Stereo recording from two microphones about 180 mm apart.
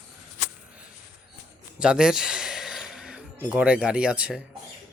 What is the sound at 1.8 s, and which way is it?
Speech, 5° right (ahead or behind).